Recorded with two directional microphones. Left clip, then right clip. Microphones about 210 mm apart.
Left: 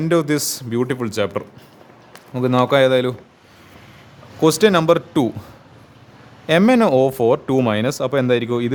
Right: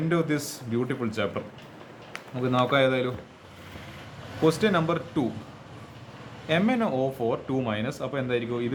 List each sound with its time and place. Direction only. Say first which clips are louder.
0.1 s speech: left 10 dB; 55° left (ahead or behind)
4.4 s speech: left 9 dB; 55° left (ahead or behind)
6.5 s speech: left 11 dB; 55° left (ahead or behind)